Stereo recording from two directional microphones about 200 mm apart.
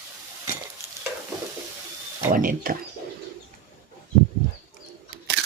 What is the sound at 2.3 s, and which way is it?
Speech, 45° right (ahead or behind).